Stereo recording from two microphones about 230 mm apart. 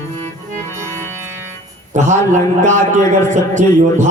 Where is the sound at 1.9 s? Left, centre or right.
Right.